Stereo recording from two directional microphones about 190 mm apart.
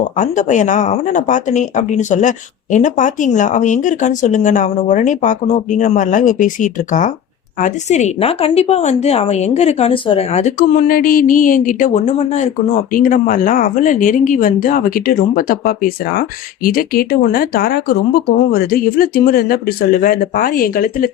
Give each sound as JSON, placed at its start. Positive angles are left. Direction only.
{"t": 0.2, "sound": "a woman's voice", "side_deg": 40}